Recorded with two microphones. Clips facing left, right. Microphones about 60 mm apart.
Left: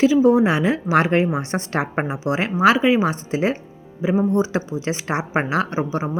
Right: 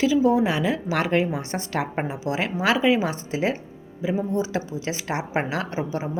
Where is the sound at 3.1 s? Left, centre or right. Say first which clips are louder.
Left 3 dB; left.